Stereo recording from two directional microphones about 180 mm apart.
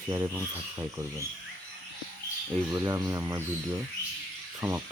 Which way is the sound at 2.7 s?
20° right (ahead or behind).